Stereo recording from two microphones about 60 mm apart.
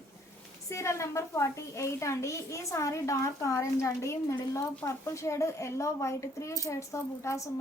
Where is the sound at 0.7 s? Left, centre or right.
Left.